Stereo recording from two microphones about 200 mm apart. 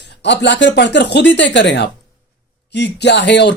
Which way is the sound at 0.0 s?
60° left (ahead or behind).